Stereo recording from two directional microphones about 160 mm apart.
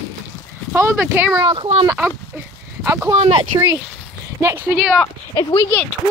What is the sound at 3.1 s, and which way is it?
Speech, 35° right (ahead or behind).